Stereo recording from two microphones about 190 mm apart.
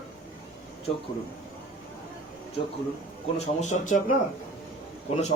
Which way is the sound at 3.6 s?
40° left (ahead or behind).